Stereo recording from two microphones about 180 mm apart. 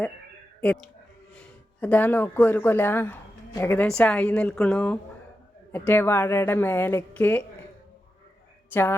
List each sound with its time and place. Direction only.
0.6 s a woman's voice: 5° left (ahead or behind)
8.7 s a woman's voice: 10° left (ahead or behind)